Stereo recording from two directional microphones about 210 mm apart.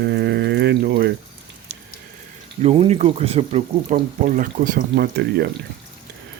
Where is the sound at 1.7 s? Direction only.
50° right (ahead or behind).